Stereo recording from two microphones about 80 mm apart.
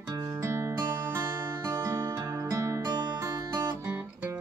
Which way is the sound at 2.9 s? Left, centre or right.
Right.